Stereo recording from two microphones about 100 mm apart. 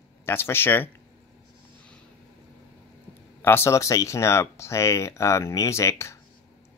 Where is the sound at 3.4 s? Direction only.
25° left (ahead or behind).